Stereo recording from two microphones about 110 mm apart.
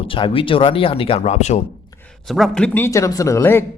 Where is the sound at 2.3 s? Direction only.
Centre (ahead or behind).